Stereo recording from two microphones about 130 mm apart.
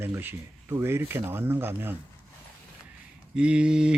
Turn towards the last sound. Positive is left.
turn(degrees=-5)  # may be behind; listen again after turning